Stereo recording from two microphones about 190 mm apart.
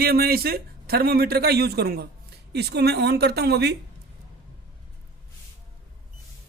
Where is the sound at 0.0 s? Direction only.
55° right (ahead or behind).